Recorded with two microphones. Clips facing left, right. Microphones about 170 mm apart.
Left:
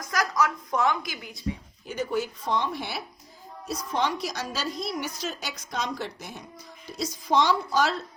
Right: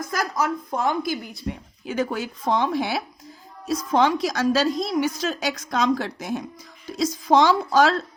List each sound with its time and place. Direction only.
0.1 s speech: 30° right (ahead or behind)
1.3 s a woman's voice: 80° right